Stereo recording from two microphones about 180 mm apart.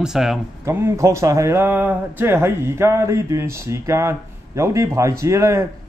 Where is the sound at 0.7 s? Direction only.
15° right (ahead or behind).